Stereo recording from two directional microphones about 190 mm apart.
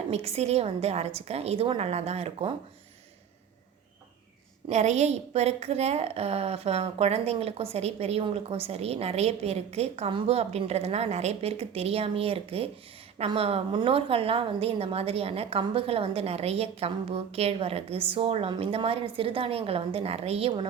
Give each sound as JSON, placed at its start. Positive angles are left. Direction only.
{"t": 0.1, "sound": "a woman's voice", "side_deg": -35}
{"t": 4.7, "sound": "a woman's voice", "side_deg": -35}